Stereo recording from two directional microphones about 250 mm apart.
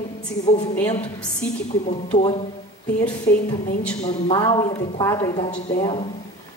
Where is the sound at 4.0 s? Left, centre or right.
Centre.